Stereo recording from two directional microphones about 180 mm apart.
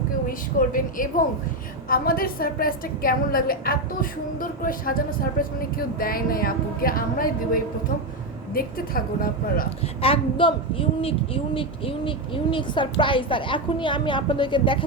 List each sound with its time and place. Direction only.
0.3 s a woman's voice: 50° left (ahead or behind)
10.0 s a woman's voice: 30° left (ahead or behind)